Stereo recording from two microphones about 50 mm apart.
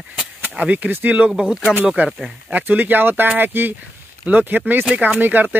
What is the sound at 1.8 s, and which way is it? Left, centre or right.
Speech, right.